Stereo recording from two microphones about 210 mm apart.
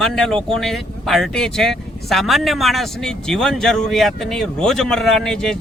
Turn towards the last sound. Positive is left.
turn(degrees=5)  # may be behind; listen again after turning